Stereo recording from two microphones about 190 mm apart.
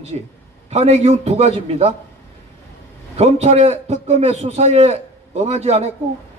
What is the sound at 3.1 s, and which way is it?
A man's voice, 35° right (ahead or behind).